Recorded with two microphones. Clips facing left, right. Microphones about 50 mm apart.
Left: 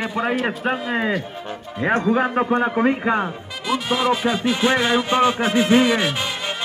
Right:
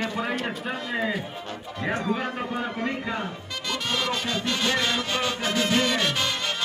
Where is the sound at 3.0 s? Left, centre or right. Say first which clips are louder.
Left 9 dB; left.